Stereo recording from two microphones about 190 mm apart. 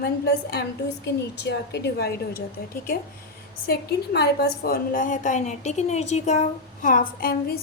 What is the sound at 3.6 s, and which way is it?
A woman's voice, 55° left (ahead or behind).